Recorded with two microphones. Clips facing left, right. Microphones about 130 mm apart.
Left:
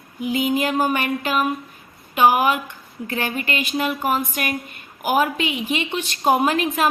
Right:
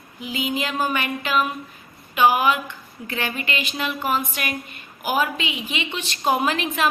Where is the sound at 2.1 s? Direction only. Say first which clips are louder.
Left 1 dB; 45° left (ahead or behind).